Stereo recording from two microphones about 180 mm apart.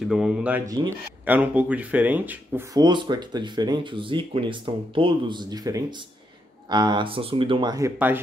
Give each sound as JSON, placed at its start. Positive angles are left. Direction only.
{"t": 0.1, "sound": "speech", "side_deg": -5}
{"t": 2.7, "sound": "speech", "side_deg": -25}